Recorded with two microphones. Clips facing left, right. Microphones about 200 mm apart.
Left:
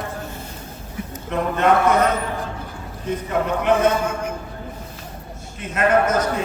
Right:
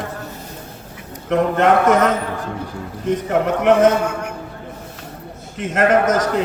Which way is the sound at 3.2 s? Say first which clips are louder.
Right 4 dB; 85° right.